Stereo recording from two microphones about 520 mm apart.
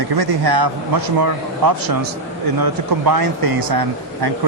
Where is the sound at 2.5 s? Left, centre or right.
Right.